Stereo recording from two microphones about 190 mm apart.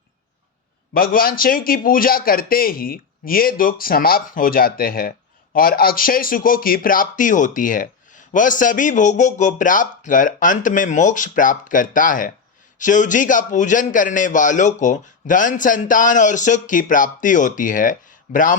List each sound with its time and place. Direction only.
0.9 s speech: 50° left (ahead or behind)